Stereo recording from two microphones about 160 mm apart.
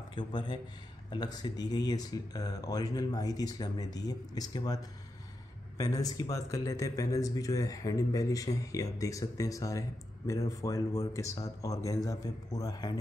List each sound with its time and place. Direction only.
0.1 s speech: 30° left (ahead or behind)